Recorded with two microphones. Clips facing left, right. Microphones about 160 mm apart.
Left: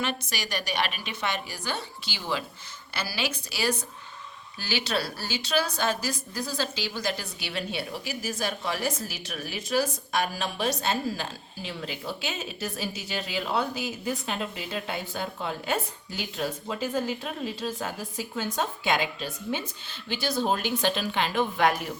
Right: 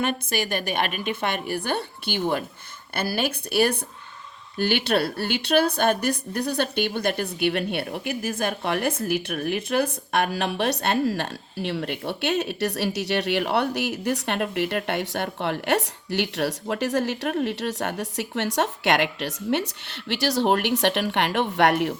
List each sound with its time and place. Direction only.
0.0 s a woman's voice: 55° right (ahead or behind); by 21.9 s 70° right (ahead or behind)